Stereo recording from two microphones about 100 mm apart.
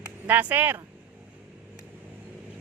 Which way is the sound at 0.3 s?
20° right (ahead or behind).